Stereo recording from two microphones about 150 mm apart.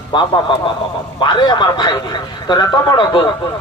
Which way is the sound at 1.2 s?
30° left (ahead or behind).